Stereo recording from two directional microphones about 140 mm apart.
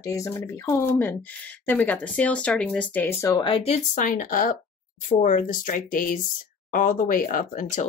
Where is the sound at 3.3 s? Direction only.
40° left (ahead or behind).